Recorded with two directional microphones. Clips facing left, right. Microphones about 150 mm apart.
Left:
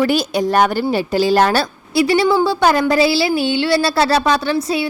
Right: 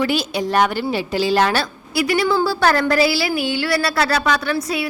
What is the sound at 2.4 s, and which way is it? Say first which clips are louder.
A woman's voice: left 3 dB; 15° left (ahead or behind).